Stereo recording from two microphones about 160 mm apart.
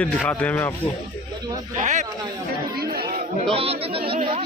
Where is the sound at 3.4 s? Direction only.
35° right (ahead or behind).